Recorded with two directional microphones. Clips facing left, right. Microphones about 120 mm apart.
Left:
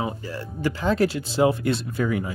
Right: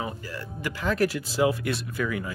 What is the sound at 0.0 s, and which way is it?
Speech, 30° left (ahead or behind).